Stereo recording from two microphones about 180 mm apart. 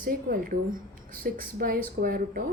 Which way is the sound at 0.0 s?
50° right (ahead or behind).